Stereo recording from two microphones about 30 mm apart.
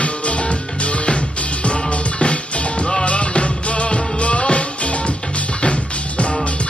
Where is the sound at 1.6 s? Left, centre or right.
Left.